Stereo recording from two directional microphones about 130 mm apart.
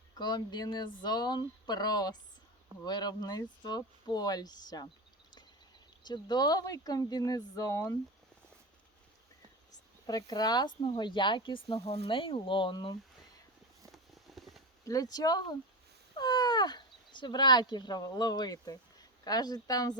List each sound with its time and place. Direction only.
0.2 s speech: 35° left (ahead or behind)
6.1 s speech: 30° left (ahead or behind)
10.1 s speech: 30° left (ahead or behind)
13.9 s a sound: centre (ahead or behind)
14.8 s speech: 30° left (ahead or behind)